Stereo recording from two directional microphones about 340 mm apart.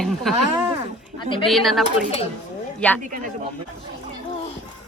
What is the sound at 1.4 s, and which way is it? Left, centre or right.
Speech, centre.